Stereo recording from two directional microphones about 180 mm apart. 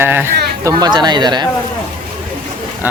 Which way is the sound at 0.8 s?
25° right (ahead or behind).